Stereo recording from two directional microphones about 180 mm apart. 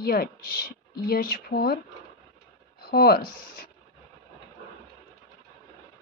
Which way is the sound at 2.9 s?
60° left (ahead or behind).